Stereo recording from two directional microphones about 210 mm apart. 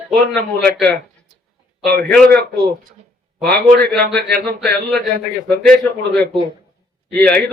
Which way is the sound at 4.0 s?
50° right (ahead or behind).